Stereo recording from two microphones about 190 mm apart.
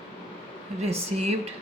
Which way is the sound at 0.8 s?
35° right (ahead or behind).